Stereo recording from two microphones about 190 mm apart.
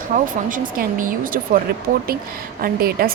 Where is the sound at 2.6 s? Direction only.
50° right (ahead or behind).